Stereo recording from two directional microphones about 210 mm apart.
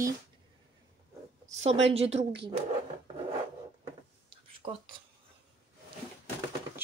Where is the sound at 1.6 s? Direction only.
30° right (ahead or behind).